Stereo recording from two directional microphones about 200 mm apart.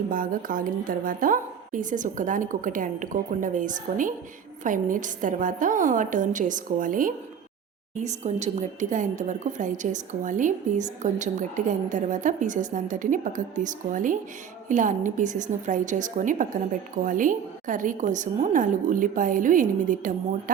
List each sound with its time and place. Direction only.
0.1 s a woman's voice: 45° right (ahead or behind)